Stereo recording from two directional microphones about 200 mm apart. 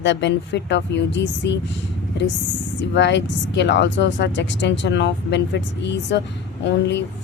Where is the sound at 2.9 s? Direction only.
60° left (ahead or behind).